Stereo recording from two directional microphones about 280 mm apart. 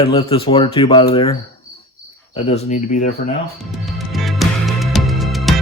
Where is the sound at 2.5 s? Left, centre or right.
Left.